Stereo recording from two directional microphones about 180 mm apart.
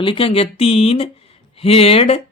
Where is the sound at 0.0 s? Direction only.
30° left (ahead or behind).